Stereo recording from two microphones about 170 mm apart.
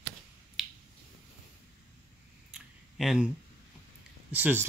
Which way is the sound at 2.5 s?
Centre (ahead or behind).